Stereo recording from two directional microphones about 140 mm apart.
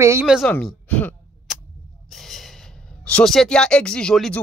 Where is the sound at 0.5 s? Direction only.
10° left (ahead or behind).